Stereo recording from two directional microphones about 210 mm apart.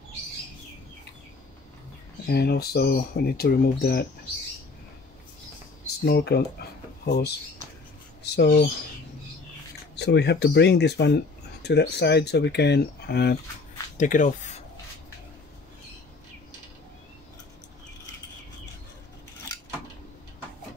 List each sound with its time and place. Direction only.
2.2 s speech: 50° left (ahead or behind)
6.0 s speech: 50° left (ahead or behind)
9.9 s speech: 55° left (ahead or behind)
13.9 s speech: 35° left (ahead or behind)